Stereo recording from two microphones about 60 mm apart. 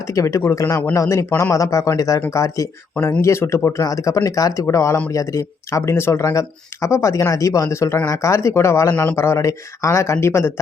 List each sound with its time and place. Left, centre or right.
0.0 s speech: left
3.8 s speech: left
4.6 s speech: left
6.3 s speech: left
8.9 s speech: left
9.1 s speech: left